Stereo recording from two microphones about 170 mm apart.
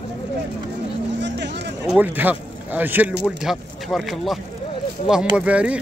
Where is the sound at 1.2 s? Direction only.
85° right.